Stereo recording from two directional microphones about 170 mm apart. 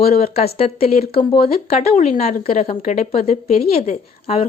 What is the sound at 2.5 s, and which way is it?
Speech, 55° left (ahead or behind).